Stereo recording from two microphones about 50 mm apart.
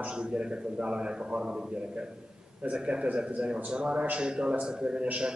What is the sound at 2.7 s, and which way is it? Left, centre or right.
A man's voice, right.